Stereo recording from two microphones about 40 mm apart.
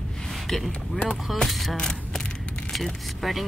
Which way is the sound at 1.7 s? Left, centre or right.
Centre.